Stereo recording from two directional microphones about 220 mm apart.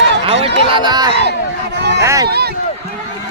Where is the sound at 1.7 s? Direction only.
50° right (ahead or behind).